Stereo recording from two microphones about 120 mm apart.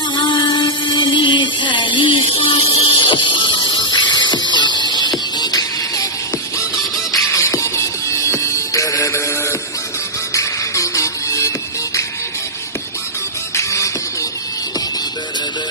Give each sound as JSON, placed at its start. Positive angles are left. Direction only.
{"t": 0.2, "sound": "a sound", "side_deg": 45}
{"t": 4.9, "sound": "music", "side_deg": 35}
{"t": 7.1, "sound": "music", "side_deg": 25}
{"t": 13.5, "sound": "music", "side_deg": 25}